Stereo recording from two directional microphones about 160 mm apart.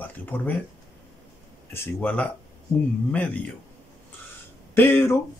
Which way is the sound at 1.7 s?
10° left (ahead or behind).